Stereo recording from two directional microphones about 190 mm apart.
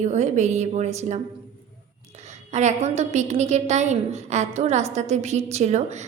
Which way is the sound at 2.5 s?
35° right (ahead or behind).